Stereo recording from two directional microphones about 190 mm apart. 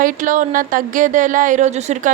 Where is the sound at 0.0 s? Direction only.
45° right (ahead or behind).